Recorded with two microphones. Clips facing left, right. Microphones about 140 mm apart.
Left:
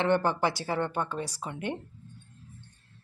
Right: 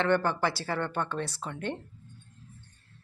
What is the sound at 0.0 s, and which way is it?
Speech, 15° left (ahead or behind).